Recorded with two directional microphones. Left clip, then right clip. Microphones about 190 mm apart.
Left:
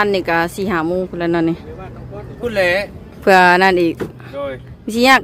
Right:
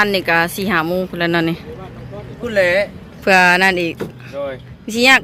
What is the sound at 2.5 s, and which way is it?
Speech, 65° left (ahead or behind).